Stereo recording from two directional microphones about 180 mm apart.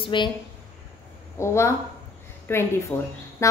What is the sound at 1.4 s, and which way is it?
A woman's voice, 15° left (ahead or behind).